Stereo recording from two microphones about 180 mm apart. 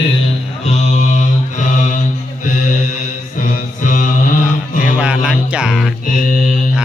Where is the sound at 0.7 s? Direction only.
40° left (ahead or behind).